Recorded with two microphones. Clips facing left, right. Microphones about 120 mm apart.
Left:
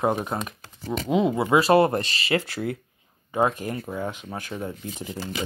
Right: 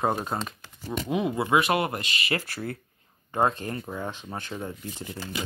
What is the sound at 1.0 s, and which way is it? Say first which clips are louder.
Speech: left 5 dB; 25° left (ahead or behind).